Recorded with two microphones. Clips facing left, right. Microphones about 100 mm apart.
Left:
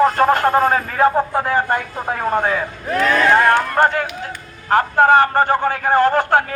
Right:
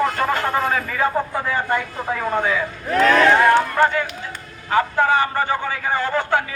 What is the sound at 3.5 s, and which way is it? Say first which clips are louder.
A man's voice: left 1 dB; 55° left (ahead or behind).